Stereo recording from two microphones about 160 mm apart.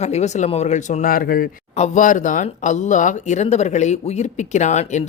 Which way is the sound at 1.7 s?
50° left (ahead or behind).